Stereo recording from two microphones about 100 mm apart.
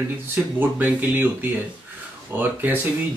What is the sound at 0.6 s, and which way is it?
Speech, 20° right (ahead or behind).